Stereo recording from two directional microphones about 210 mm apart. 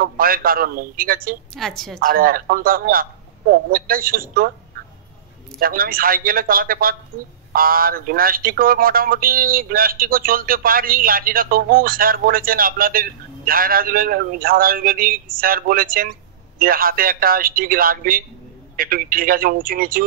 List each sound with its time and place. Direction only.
0.0 s speech: 45° right (ahead or behind)
1.5 s a woman's voice: centre (ahead or behind)
2.0 s speech: 45° right (ahead or behind)
5.6 s speech: 45° right (ahead or behind)